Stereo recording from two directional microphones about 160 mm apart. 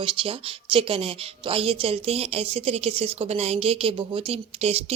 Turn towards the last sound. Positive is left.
turn(degrees=-40)  # may be behind; listen again after turning